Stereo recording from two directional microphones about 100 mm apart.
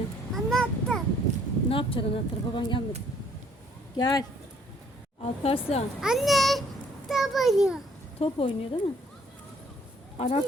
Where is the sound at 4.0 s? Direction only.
45° left (ahead or behind).